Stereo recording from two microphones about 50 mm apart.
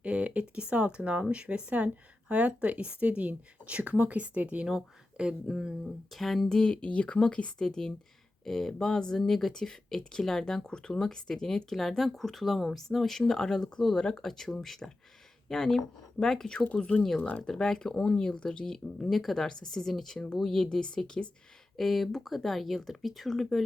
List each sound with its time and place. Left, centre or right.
0.0 s speech: right
5.8 s speech: centre
6.6 s speech: centre
17.2 s speech: left
17.4 s speech: centre
21.8 s speech: centre